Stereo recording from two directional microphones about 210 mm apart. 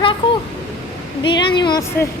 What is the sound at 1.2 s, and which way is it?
Speech, 20° left (ahead or behind).